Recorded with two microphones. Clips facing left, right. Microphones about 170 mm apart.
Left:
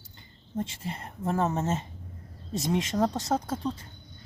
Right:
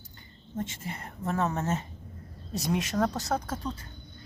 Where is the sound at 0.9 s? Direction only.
30° left (ahead or behind).